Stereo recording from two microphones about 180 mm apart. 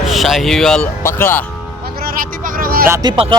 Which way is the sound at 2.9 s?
20° right (ahead or behind).